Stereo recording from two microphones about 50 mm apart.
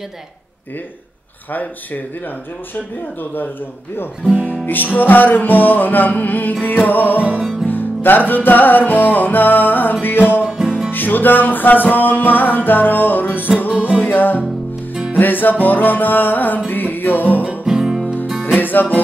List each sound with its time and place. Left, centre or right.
2.7 s music: left
4.6 s music: left
10.4 s music: centre
10.9 s music: left
13.7 s music: right
14.0 s music: left
17.6 s music: centre
18.6 s music: left